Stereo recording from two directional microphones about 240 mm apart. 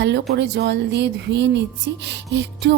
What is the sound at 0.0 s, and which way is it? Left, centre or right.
A woman's voice, right.